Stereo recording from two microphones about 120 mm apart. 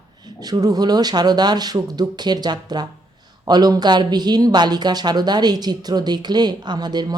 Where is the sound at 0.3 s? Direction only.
35° right (ahead or behind).